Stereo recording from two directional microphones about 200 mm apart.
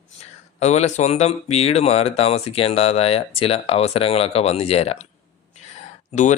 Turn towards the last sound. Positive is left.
turn(degrees=35)  # may be behind; listen again after turning